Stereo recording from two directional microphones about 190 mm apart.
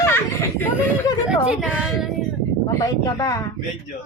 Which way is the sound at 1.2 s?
5° right (ahead or behind).